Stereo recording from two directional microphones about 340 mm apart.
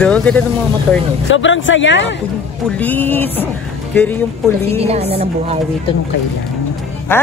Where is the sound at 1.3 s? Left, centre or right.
Left.